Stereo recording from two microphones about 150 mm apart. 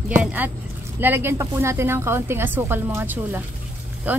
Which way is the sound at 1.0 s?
15° right (ahead or behind).